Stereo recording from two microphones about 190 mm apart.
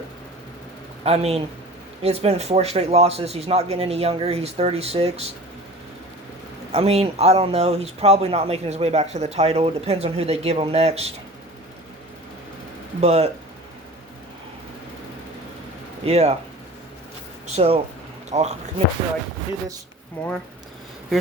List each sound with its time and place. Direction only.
1.0 s speech: 30° right (ahead or behind)
6.7 s speech: 30° right (ahead or behind)
13.0 s speech: 35° right (ahead or behind)
16.0 s speech: 35° right (ahead or behind)
17.4 s speech: 35° right (ahead or behind)
20.2 s speech: 5° left (ahead or behind)